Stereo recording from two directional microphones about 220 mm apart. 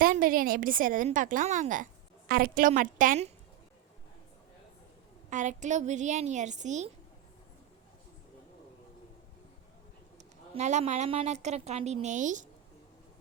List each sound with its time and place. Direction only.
0.0 s a woman's voice: 40° right (ahead or behind)
5.3 s a woman's voice: 35° right (ahead or behind)
10.5 s a woman's voice: 30° right (ahead or behind)